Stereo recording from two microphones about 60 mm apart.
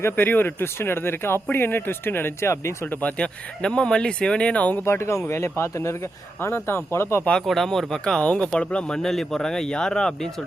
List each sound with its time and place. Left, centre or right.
0.0 s speech: left
2.5 s speech: left
2.9 s speech: left
3.6 s speech: centre
4.9 s speech: left
7.4 s speech: centre
8.2 s speech: centre